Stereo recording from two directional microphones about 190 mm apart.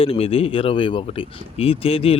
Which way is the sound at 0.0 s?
30° left (ahead or behind).